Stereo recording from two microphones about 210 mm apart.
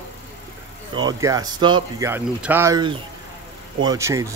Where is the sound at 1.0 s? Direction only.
15° right (ahead or behind).